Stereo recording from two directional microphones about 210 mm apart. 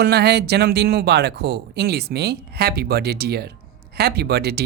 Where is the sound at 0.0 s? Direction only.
50° right (ahead or behind).